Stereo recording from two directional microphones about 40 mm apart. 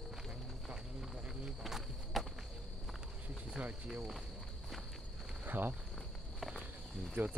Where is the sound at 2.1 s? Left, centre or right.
Centre.